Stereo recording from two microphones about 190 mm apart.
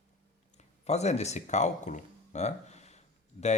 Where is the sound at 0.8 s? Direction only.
35° left (ahead or behind).